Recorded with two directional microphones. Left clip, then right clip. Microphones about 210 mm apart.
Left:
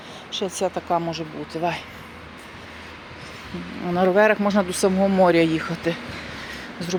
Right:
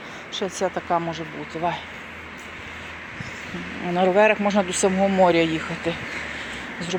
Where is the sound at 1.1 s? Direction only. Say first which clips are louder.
Left 1 dB; 20° left (ahead or behind).